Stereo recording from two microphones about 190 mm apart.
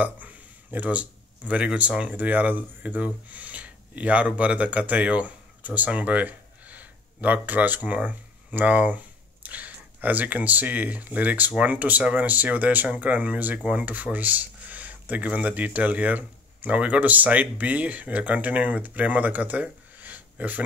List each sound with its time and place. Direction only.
0.0 s speech: 10° right (ahead or behind)